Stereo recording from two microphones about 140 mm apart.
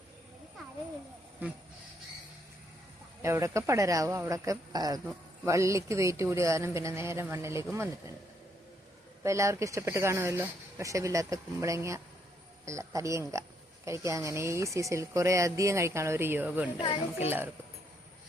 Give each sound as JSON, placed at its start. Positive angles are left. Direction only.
{"t": 3.2, "sound": "speech", "side_deg": -20}
{"t": 9.2, "sound": "a child's voice", "side_deg": -20}